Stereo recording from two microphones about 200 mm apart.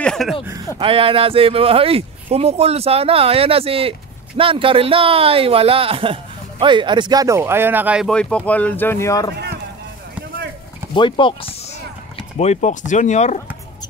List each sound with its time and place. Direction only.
0.0 s a sound: centre (ahead or behind)
0.7 s speech: 25° right (ahead or behind); by 9.3 s 15° left (ahead or behind)
10.9 s speech: 25° left (ahead or behind)